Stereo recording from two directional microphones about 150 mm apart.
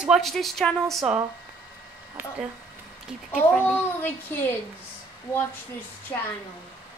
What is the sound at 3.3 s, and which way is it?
A woman's voice, 10° left (ahead or behind).